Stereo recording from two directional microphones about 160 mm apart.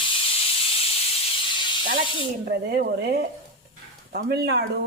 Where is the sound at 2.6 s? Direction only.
85° right.